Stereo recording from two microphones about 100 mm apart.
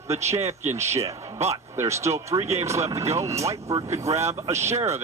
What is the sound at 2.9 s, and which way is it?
Speech, 30° right (ahead or behind).